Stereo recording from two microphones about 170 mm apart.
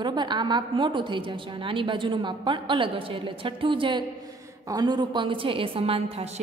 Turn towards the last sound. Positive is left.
turn(degrees=-40)  # may be behind; listen again after turning